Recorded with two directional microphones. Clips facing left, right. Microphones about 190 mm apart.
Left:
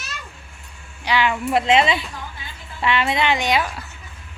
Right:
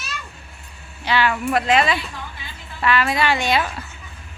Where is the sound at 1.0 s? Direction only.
15° left (ahead or behind).